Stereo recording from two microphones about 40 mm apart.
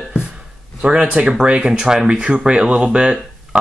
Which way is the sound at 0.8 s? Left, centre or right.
Right.